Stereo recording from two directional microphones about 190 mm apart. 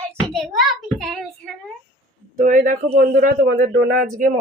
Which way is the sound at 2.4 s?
45° right (ahead or behind).